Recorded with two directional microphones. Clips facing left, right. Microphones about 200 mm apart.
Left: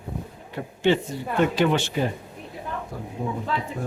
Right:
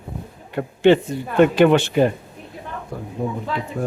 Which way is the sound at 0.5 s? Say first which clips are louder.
Right 7 dB; 60° right (ahead or behind).